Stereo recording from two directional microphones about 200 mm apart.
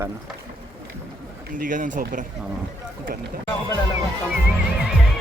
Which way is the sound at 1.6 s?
40° right (ahead or behind).